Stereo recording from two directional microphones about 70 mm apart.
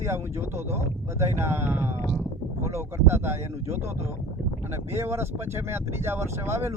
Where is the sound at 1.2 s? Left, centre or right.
Right.